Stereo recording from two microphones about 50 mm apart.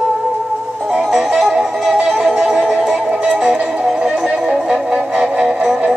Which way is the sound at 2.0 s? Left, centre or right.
Centre.